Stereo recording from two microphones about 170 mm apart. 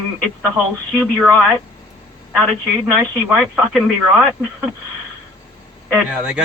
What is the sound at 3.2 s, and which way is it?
Speech, 5° right (ahead or behind).